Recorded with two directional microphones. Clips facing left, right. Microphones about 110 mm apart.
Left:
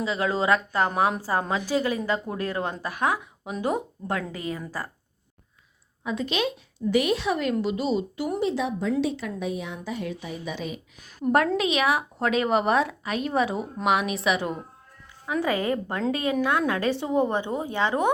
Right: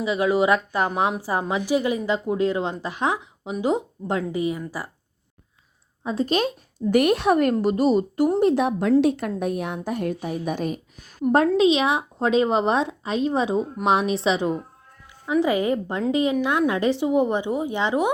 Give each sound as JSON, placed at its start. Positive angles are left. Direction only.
{"t": 0.0, "sound": "speech", "side_deg": -15}
{"t": 6.0, "sound": "speech", "side_deg": -35}
{"t": 6.9, "sound": "a woman's voice", "side_deg": -55}
{"t": 11.3, "sound": "speech", "side_deg": -25}